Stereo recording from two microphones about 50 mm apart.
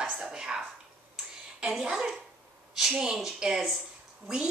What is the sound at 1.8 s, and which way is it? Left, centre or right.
A woman's voice, centre.